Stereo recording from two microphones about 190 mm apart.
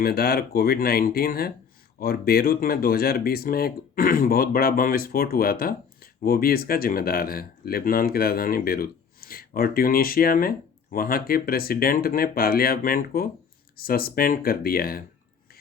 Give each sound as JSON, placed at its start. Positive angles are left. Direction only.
{"t": 0.0, "sound": "speech", "side_deg": 55}